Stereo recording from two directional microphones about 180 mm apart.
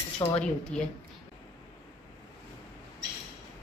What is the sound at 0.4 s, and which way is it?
Speech, 5° left (ahead or behind).